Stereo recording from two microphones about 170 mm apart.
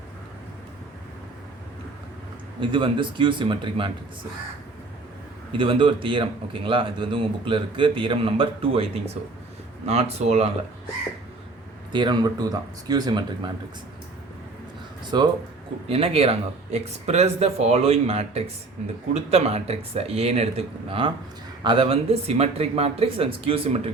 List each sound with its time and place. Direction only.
2.6 s speech: 30° right (ahead or behind)
5.5 s a man's voice: 30° right (ahead or behind)
11.9 s speech: 25° right (ahead or behind)
15.0 s a man's voice: 25° right (ahead or behind)